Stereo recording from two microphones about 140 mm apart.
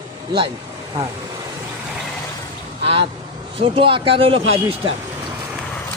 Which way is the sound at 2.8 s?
45° right (ahead or behind).